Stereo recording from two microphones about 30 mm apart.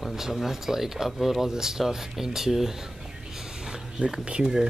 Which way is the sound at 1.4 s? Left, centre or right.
Centre.